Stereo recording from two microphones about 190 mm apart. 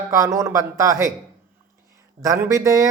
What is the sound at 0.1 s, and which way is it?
Speech, 15° right (ahead or behind).